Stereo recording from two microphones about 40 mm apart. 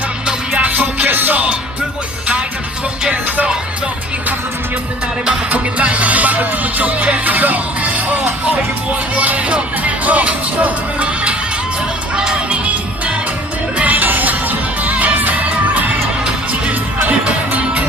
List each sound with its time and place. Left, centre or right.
0.3 s music: right
1.0 s music: right
5.5 s music: right
9.5 s speech: right
12.5 s music: right
13.8 s music: right